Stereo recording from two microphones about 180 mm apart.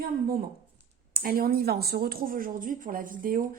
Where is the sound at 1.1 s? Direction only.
55° right (ahead or behind).